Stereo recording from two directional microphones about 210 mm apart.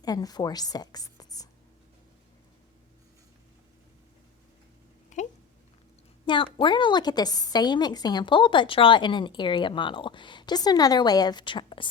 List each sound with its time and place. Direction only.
0.0 s speech: 20° left (ahead or behind)
5.1 s a sound: 35° left (ahead or behind)
6.2 s a woman's voice: 25° left (ahead or behind)